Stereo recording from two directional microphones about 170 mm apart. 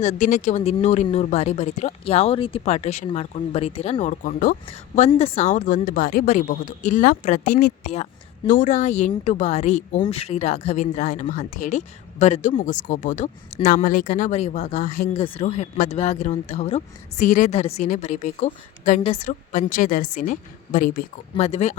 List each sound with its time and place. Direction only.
0.0 s speech: 45° left (ahead or behind)
4.9 s speech: 40° left (ahead or behind)